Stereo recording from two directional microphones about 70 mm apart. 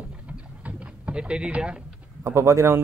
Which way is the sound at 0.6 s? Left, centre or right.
Centre.